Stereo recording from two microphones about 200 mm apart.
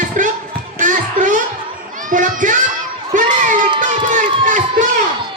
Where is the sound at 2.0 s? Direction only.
40° right (ahead or behind).